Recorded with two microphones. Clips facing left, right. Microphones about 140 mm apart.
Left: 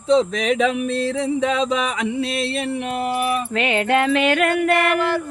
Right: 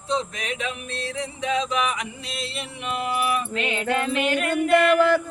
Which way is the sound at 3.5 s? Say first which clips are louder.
Left 6 dB; 70° left (ahead or behind).